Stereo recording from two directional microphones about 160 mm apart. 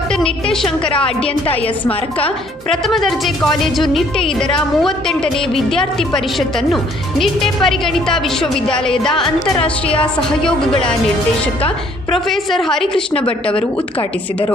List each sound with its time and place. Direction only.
0.2 s a woman's voice: 5° left (ahead or behind)
0.9 s a woman's voice: 35° left (ahead or behind)
2.8 s a woman's voice: centre (ahead or behind)
7.2 s a woman's voice: centre (ahead or behind)
9.6 s a woman's voice: 35° left (ahead or behind)
12.1 s a woman's voice: centre (ahead or behind)